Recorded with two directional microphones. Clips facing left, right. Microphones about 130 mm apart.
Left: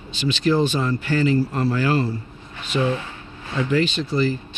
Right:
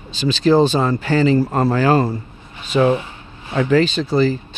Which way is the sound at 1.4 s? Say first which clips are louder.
Right 5 dB; 50° right (ahead or behind).